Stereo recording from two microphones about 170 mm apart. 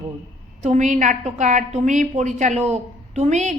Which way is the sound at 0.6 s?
45° right (ahead or behind).